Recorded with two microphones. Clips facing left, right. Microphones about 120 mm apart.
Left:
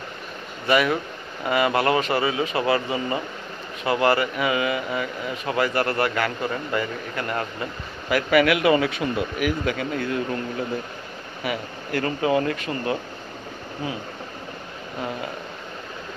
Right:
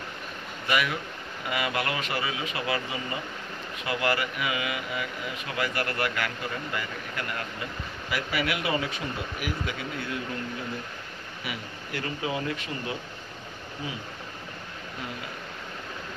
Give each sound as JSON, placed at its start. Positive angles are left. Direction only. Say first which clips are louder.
{"t": 0.7, "sound": "speech", "louder": "left 7 dB", "side_deg": 40}
{"t": 8.1, "sound": "speech", "louder": "left 11 dB", "side_deg": 70}
{"t": 11.4, "sound": "speech", "louder": "left 9 dB", "side_deg": 45}